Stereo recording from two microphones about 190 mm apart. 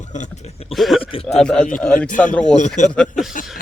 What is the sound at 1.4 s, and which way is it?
Speech, 5° left (ahead or behind).